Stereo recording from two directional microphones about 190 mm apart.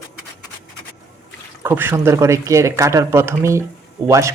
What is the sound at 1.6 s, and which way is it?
Speech, 10° right (ahead or behind).